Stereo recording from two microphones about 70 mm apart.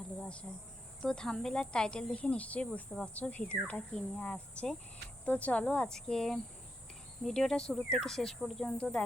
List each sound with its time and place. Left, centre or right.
0.2 s insect: centre
1.0 s speech: centre